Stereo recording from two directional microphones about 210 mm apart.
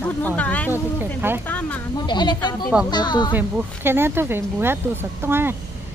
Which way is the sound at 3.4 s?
10° right (ahead or behind).